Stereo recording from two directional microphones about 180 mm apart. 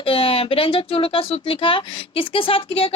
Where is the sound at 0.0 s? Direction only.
30° left (ahead or behind).